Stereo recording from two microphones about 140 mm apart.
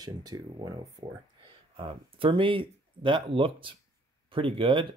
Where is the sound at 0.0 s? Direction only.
30° right (ahead or behind).